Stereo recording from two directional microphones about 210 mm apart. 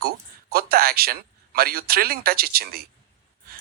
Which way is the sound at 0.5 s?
45° right (ahead or behind).